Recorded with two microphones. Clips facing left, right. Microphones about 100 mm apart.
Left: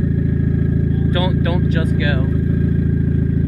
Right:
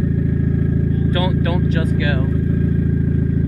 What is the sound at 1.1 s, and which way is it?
Speech, 10° left (ahead or behind).